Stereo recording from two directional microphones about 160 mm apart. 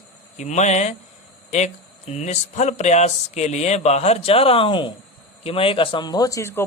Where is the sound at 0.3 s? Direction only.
45° left (ahead or behind).